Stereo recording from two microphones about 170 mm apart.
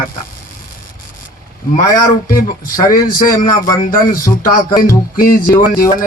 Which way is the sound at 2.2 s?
55° left (ahead or behind).